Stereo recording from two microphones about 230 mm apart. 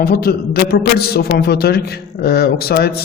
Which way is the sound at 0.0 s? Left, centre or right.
Left.